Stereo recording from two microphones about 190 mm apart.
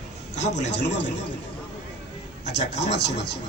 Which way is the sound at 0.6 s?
65° left (ahead or behind).